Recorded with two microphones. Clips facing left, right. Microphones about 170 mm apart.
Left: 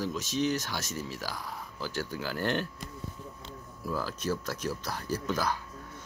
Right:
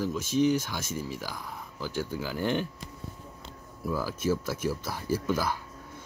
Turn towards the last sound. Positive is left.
turn(degrees=-10)  # may be behind; listen again after turning